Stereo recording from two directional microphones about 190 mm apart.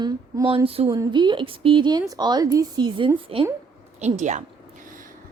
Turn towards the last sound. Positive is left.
turn(degrees=-45)  # may be behind; listen again after turning